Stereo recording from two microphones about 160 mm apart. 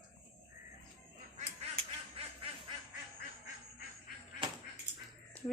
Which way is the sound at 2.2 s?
35° right (ahead or behind).